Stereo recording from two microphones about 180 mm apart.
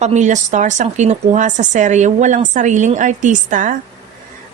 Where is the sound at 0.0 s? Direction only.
40° right (ahead or behind).